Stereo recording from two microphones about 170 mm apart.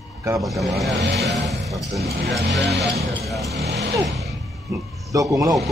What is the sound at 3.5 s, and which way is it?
Speech, 90° right.